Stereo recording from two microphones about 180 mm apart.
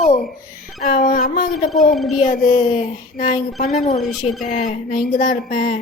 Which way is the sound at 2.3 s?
40° left (ahead or behind).